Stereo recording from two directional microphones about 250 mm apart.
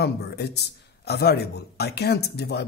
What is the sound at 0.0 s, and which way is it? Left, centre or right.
A man's voice, left.